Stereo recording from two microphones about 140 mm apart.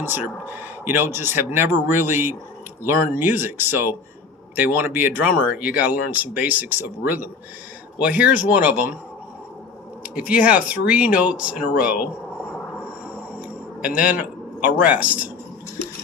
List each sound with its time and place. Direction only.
0.0 s speech: 15° right (ahead or behind)
10.0 s speech: 10° right (ahead or behind)
13.8 s speech: 10° right (ahead or behind)